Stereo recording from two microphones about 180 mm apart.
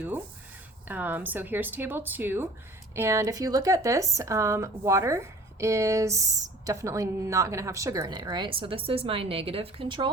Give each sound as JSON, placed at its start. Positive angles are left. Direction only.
{"t": 0.9, "sound": "speech", "side_deg": -10}